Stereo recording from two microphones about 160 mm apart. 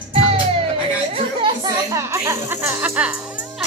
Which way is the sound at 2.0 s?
20° right (ahead or behind).